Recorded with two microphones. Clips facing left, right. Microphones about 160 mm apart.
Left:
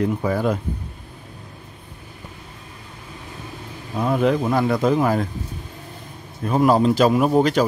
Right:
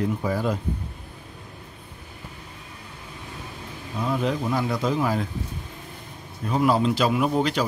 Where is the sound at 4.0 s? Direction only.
55° left (ahead or behind).